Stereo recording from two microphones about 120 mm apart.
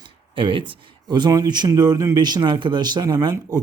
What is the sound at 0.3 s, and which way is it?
Speech, 45° right (ahead or behind).